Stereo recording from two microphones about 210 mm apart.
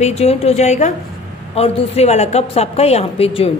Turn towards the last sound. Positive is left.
turn(degrees=25)  # may be behind; listen again after turning